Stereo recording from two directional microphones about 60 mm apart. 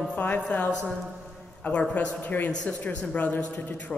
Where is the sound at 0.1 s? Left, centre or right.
Left.